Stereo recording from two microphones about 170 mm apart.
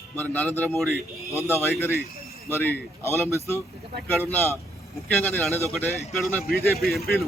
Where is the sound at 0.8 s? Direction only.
Centre (ahead or behind).